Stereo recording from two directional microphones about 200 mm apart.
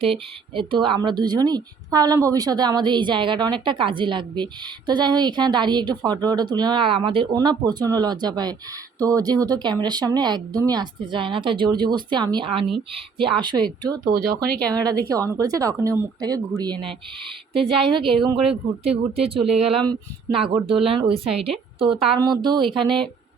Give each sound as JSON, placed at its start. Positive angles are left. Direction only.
{"t": 0.0, "sound": "speech", "side_deg": -25}
{"t": 14.7, "sound": "a woman's voice", "side_deg": -20}